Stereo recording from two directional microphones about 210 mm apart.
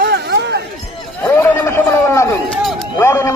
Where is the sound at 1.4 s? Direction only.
10° left (ahead or behind).